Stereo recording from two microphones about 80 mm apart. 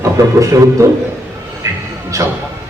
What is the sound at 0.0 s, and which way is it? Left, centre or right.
Speech, right.